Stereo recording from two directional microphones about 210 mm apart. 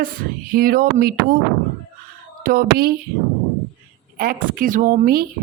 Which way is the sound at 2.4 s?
45° right (ahead or behind).